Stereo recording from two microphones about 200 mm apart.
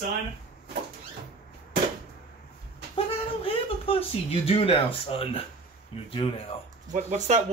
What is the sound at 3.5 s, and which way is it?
Speech, 30° left (ahead or behind).